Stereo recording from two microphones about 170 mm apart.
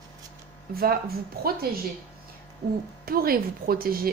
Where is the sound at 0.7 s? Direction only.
60° right (ahead or behind).